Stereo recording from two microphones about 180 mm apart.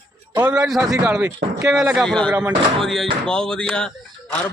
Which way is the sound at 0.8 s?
15° right (ahead or behind).